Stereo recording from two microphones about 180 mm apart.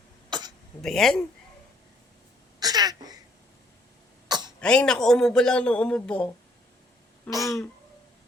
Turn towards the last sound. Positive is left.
turn(degrees=5)  # may be behind; listen again after turning